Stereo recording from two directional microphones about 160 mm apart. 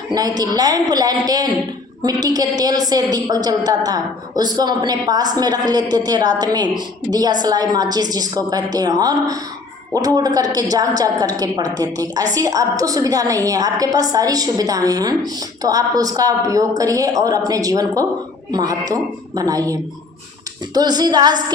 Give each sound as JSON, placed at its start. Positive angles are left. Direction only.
{"t": 0.1, "sound": "a woman's voice", "side_deg": -25}